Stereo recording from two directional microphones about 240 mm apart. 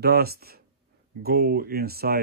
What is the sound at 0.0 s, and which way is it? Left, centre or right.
Speech, right.